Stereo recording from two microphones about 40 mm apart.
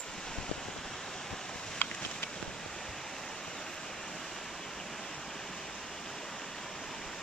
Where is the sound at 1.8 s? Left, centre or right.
Left.